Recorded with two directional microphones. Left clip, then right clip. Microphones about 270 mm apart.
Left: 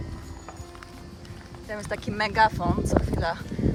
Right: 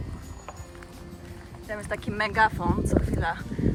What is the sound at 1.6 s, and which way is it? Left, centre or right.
Speech, centre.